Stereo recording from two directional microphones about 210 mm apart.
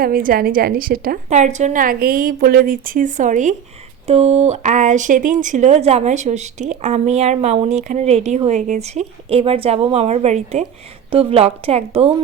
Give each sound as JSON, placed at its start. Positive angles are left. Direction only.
{"t": 0.0, "sound": "a woman's voice", "side_deg": -45}